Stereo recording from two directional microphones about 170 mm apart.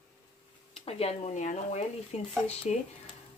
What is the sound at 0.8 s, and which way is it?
Speech, 35° left (ahead or behind).